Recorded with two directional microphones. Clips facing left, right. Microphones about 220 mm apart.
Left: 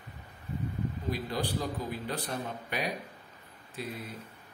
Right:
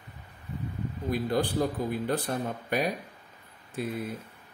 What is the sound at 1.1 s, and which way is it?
Speech, 50° right (ahead or behind).